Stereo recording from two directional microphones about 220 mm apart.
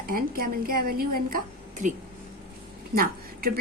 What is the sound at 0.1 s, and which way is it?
Speech, 40° right (ahead or behind).